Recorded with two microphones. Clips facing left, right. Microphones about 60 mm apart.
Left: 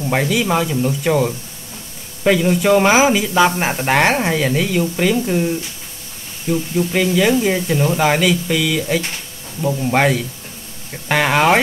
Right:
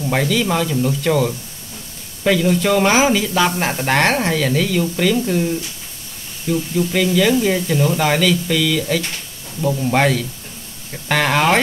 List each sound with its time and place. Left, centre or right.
0.0 s speech: centre
6.5 s speech: centre